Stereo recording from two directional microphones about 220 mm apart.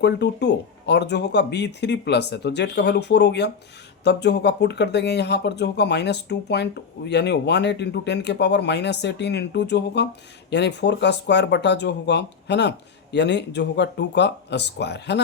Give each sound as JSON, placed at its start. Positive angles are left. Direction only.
{"t": 0.0, "sound": "speech", "side_deg": 50}